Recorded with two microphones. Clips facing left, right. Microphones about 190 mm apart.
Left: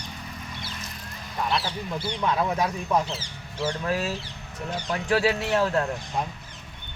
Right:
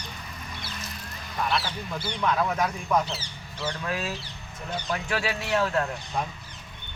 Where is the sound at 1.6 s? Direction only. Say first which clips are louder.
Left 2 dB; 20° left (ahead or behind).